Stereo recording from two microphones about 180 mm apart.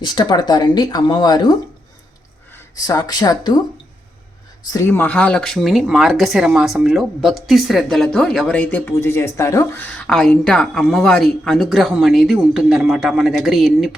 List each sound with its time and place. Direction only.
0.0 s speech: 25° left (ahead or behind)
4.7 s speech: 15° left (ahead or behind)